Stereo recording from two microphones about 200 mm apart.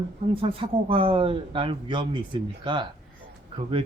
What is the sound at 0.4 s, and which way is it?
Speech, 25° right (ahead or behind).